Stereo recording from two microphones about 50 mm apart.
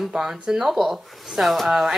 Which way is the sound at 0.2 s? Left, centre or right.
Centre.